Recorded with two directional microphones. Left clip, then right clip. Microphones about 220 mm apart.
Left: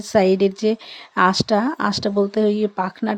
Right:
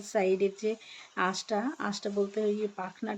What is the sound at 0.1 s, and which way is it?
Speech, 45° left (ahead or behind).